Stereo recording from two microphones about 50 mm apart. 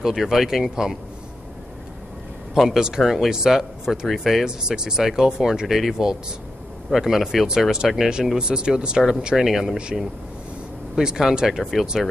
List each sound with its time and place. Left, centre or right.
0.0 s speech: centre
2.5 s speech: centre
4.5 s speech: centre
11.0 s speech: centre